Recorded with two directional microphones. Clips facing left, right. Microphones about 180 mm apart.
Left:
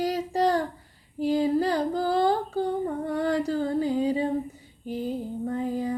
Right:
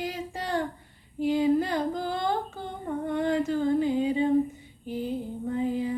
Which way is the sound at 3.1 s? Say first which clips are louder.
Right 1 dB; 35° left (ahead or behind).